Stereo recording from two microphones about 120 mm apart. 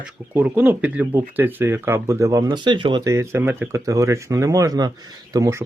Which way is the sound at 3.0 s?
25° right (ahead or behind).